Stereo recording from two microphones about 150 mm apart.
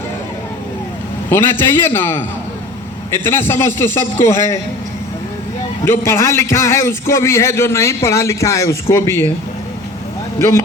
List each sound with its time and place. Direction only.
1.3 s a man's voice: 15° left (ahead or behind)
6.1 s a man's voice: 20° left (ahead or behind)